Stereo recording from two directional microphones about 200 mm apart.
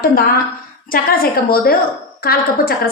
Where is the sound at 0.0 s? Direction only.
45° left (ahead or behind).